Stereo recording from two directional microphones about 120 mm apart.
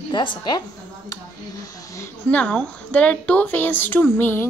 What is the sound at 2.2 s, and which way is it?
Speech, 10° left (ahead or behind).